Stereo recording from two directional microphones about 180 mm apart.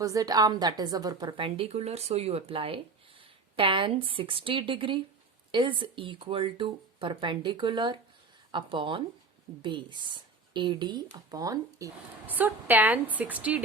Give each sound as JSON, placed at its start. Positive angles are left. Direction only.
{"t": 0.0, "sound": "a woman's voice", "side_deg": -20}